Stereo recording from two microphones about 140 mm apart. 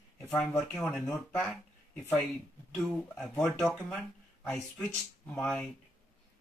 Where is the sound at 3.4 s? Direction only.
5° left (ahead or behind).